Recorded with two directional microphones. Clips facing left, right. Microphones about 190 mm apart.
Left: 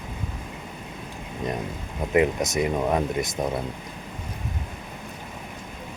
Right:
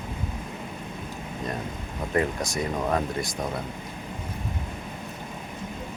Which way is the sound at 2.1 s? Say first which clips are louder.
Left 5 dB; 15° left (ahead or behind).